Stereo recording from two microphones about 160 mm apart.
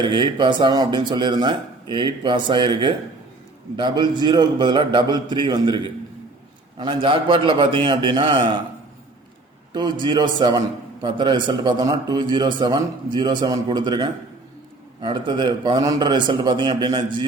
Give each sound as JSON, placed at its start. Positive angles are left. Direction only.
{"t": 0.0, "sound": "a man's voice", "side_deg": -30}
{"t": 9.7, "sound": "a man's voice", "side_deg": -30}